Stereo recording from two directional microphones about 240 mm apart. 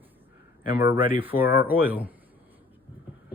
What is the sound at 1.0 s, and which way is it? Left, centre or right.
Speech, right.